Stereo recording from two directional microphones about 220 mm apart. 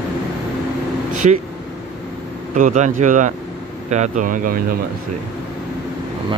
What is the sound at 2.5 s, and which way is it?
Speech, 35° right (ahead or behind).